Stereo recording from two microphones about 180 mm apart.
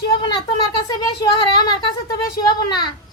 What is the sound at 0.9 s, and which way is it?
Speech, 20° left (ahead or behind).